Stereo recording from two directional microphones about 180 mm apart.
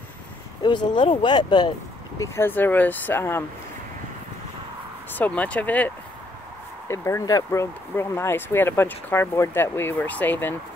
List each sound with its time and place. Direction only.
0.6 s speech: 25° left (ahead or behind)
5.1 s speech: 10° left (ahead or behind)
6.9 s speech: 15° left (ahead or behind)